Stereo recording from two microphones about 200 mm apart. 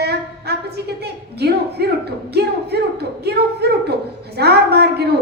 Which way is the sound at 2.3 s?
55° right (ahead or behind).